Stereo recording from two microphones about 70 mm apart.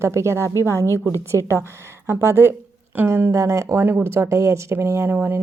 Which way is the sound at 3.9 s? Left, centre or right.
Right.